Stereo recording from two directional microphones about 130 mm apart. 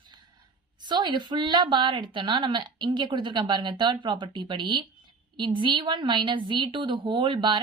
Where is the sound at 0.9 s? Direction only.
35° right (ahead or behind).